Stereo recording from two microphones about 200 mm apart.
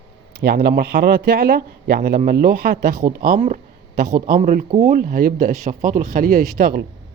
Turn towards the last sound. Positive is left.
turn(degrees=-50)  # may be behind; listen again after turning